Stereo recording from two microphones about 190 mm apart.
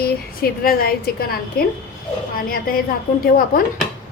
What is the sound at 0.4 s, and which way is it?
A woman's voice, 50° left (ahead or behind).